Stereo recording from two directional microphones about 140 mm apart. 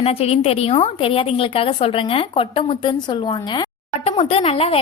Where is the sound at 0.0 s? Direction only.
45° left (ahead or behind).